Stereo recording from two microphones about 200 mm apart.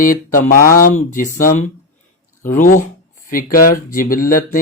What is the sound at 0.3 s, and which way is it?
Speech, 45° left (ahead or behind).